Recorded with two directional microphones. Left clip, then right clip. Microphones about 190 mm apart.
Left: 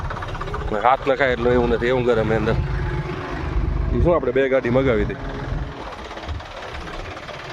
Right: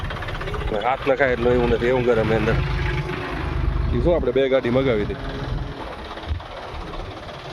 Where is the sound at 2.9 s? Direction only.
25° right (ahead or behind).